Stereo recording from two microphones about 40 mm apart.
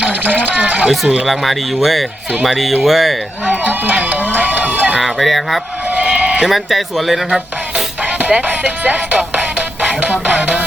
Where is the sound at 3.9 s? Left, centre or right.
Right.